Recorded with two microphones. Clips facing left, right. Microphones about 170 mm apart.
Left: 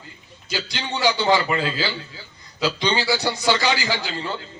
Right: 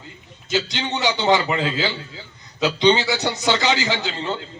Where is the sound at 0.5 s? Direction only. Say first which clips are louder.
Right 5 dB; 20° right (ahead or behind).